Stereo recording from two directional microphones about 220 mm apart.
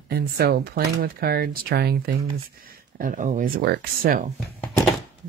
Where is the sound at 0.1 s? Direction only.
45° right (ahead or behind).